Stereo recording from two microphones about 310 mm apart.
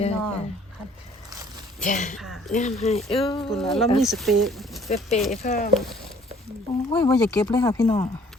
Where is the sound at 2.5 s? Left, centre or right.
Left.